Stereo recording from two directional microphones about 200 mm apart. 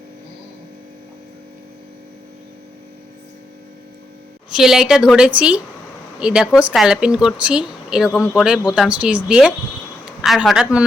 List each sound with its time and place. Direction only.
4.5 s speech: centre (ahead or behind)